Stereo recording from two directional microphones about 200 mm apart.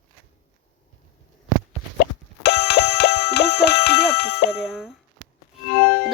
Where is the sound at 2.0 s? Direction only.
55° left (ahead or behind).